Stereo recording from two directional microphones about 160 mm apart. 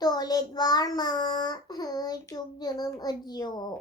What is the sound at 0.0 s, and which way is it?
Child singing, 25° left (ahead or behind).